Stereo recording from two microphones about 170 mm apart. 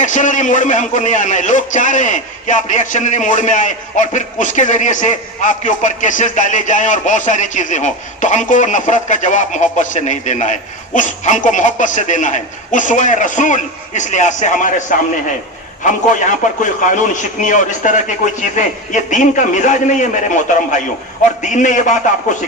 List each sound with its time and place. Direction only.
0.0 s a man's voice: 45° left (ahead or behind)